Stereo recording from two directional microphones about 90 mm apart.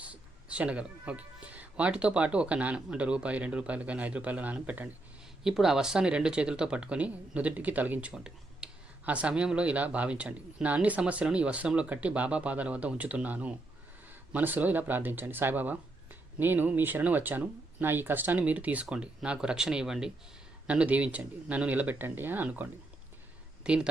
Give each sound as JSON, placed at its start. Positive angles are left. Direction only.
{"t": 0.0, "sound": "speech", "side_deg": -15}
{"t": 5.4, "sound": "speech", "side_deg": -5}